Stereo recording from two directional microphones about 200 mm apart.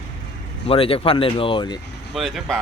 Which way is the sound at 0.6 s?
30° left (ahead or behind).